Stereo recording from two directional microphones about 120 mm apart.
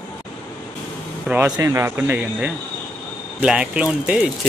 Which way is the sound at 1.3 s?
10° right (ahead or behind).